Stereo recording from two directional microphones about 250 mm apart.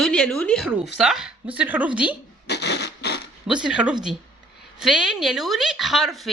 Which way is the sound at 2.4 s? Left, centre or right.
Left.